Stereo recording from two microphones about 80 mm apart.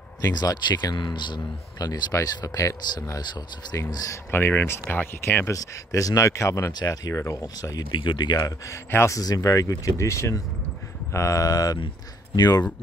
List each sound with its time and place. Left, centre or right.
0.3 s speech: left
2.2 s speech: left
3.7 s speech: left
4.3 s speech: left
5.5 s speech: left
7.9 s speech: left
8.9 s a man's voice: left
9.2 s speech: left